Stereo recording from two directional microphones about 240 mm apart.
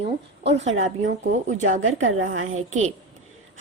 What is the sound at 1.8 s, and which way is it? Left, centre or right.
Speech, right.